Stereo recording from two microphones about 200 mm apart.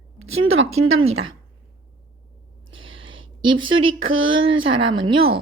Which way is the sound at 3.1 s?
25° right (ahead or behind).